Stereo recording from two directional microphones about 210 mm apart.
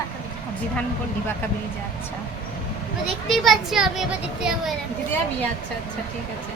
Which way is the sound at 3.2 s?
Centre (ahead or behind).